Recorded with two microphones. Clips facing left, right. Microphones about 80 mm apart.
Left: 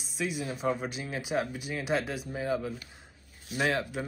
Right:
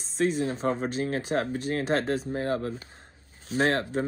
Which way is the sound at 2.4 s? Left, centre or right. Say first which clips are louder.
Even; right.